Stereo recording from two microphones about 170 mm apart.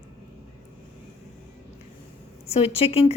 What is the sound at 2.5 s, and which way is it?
Speech, 35° left (ahead or behind).